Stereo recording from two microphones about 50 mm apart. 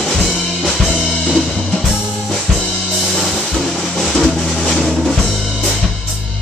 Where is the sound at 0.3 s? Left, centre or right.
Centre.